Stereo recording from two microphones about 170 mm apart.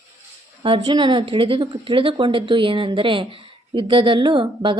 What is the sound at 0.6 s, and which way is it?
A woman's voice, 30° right (ahead or behind).